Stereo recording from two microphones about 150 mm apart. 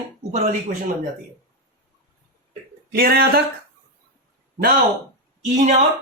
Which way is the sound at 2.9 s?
90° right.